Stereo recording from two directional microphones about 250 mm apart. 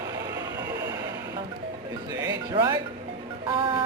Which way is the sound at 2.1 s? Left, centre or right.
Centre.